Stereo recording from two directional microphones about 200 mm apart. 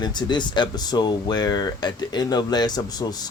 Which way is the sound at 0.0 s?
20° left (ahead or behind).